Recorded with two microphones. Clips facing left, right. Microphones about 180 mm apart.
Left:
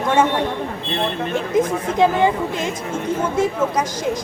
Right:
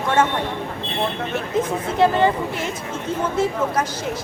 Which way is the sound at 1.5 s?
15° left (ahead or behind).